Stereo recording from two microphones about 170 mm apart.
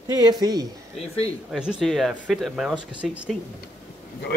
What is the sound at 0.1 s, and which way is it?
Speech, 25° right (ahead or behind).